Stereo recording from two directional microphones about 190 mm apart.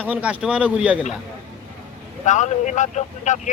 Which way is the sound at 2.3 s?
40° left (ahead or behind).